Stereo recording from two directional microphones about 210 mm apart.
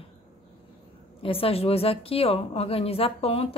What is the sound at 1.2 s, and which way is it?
A woman's voice, 25° left (ahead or behind).